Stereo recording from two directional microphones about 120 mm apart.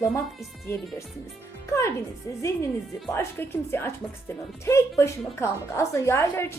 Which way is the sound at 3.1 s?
20° left (ahead or behind).